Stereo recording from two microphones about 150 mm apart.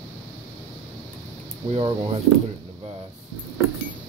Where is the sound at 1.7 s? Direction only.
40° right (ahead or behind).